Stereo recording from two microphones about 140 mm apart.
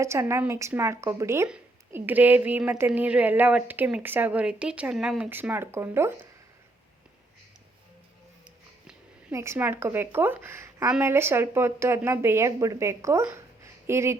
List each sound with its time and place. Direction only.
0.0 s a woman's voice: 20° right (ahead or behind)
9.3 s a woman's voice: 20° right (ahead or behind)